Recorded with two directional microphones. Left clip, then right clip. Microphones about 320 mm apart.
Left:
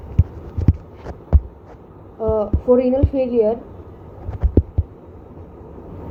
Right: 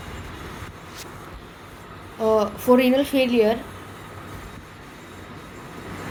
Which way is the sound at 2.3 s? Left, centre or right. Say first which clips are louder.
Left 2 dB; right.